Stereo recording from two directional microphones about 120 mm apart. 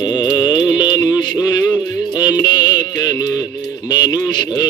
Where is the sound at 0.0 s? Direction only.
40° left (ahead or behind).